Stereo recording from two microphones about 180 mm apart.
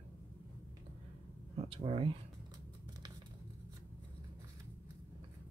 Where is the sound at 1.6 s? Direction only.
35° right (ahead or behind).